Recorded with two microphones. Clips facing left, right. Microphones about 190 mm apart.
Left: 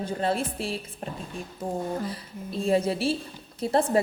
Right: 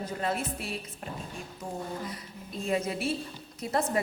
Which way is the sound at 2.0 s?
30° left (ahead or behind).